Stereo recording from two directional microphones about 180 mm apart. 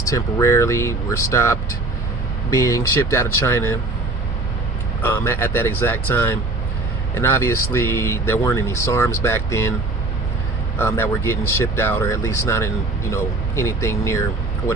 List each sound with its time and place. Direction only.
0.0 s speech: 15° left (ahead or behind)
5.0 s speech: 15° left (ahead or behind)
10.8 s speech: 15° left (ahead or behind)